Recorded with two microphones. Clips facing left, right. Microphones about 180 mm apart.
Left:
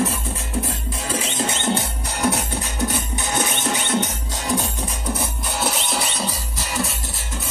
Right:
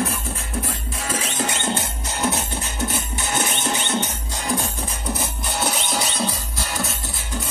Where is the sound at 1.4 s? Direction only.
20° left (ahead or behind).